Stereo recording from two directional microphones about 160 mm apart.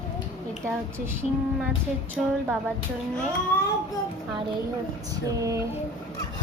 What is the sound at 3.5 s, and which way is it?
Speech, 10° left (ahead or behind).